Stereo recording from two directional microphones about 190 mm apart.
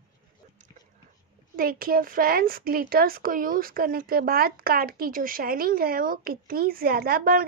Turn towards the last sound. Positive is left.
turn(degrees=-50)  # may be behind; listen again after turning